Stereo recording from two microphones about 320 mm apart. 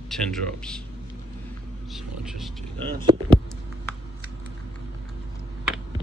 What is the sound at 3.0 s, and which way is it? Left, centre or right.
Speech, centre.